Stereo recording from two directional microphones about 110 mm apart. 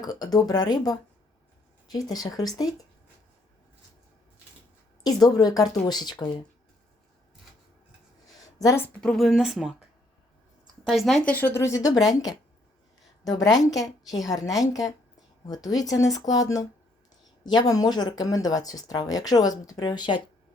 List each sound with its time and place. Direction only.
0.0 s speech: 35° left (ahead or behind)
5.0 s speech: 35° left (ahead or behind)
8.5 s a woman's voice: 30° left (ahead or behind)
9.0 s speech: 5° left (ahead or behind)
10.8 s speech: centre (ahead or behind)
11.3 s speech: 20° left (ahead or behind); by 20.2 s 45° left (ahead or behind)